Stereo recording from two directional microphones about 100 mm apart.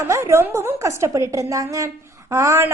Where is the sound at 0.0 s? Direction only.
30° right (ahead or behind).